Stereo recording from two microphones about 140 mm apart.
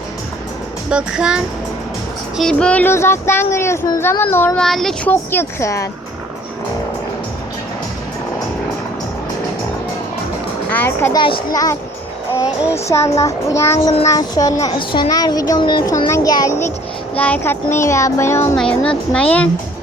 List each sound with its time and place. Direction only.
0.9 s speech: 5° right (ahead or behind)
2.4 s speech: 5° left (ahead or behind)
4.5 s speech: centre (ahead or behind)
5.3 s a child's voice: 15° left (ahead or behind)
10.7 s speech: 15° left (ahead or behind)
11.1 s a child's voice: 35° left (ahead or behind)
11.5 s a child's voice: 25° left (ahead or behind)
18.5 s speech: 5° left (ahead or behind)